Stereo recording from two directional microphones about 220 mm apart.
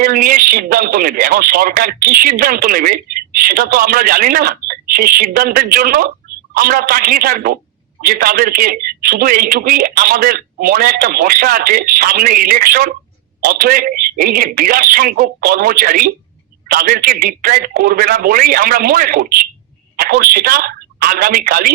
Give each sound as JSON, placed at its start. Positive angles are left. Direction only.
{"t": 0.0, "sound": "a woman's voice", "side_deg": -40}